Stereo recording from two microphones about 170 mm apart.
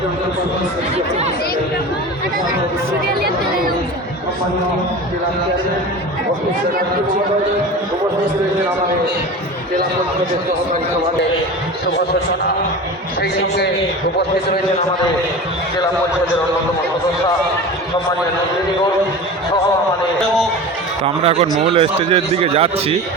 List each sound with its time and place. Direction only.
21.0 s speech: 35° right (ahead or behind)